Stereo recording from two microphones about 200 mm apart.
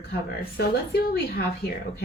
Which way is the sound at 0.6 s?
50° left (ahead or behind).